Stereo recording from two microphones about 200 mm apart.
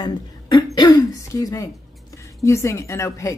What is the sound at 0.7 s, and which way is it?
Throat clearing, 20° left (ahead or behind).